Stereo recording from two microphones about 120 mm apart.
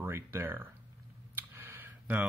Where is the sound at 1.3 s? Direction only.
20° right (ahead or behind).